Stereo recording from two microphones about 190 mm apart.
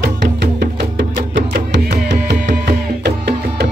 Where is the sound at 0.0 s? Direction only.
55° right (ahead or behind).